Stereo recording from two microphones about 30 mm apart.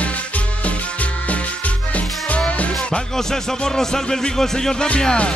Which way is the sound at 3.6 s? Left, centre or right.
Centre.